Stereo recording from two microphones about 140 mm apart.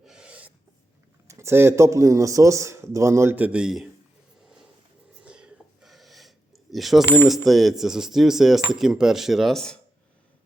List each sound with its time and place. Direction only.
0.0 s snort: 5° right (ahead or behind)
1.3 s speech: 20° right (ahead or behind); by 3.8 s 5° right (ahead or behind)
5.2 s a sound: 5° right (ahead or behind)
7.4 s speech: centre (ahead or behind)